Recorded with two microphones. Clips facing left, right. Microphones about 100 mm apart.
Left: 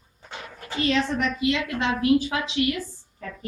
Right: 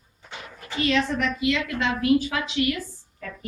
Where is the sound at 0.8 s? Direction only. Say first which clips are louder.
Even; 30° left (ahead or behind).